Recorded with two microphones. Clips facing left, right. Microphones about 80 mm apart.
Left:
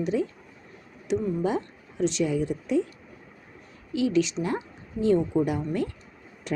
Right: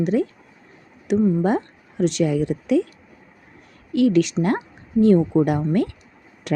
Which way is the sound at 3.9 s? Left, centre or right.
Right.